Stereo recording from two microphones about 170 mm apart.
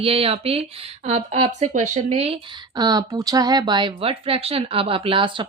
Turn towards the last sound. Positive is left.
turn(degrees=-30)  # may be behind; listen again after turning